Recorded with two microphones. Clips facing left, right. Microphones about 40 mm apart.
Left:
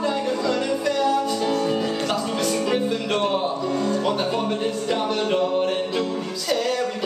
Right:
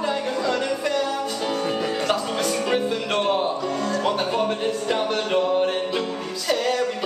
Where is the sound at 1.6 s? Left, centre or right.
Centre.